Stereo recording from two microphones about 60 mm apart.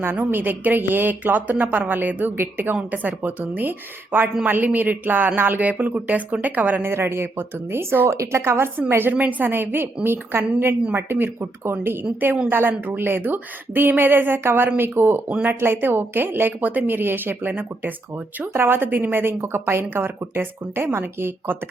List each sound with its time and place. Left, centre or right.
0.0 s a woman's voice: right
6.8 s a woman's voice: right
8.1 s a woman's voice: right